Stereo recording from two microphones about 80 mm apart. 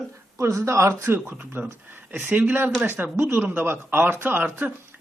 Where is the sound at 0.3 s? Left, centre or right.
Right.